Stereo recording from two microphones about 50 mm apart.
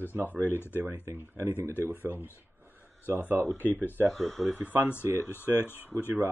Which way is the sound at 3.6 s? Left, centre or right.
Left.